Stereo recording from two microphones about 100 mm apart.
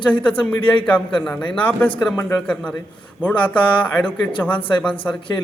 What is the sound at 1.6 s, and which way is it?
Speech, 15° left (ahead or behind).